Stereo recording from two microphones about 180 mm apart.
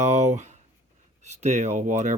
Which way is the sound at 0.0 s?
40° right (ahead or behind).